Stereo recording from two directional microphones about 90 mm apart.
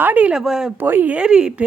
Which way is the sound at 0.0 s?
15° right (ahead or behind).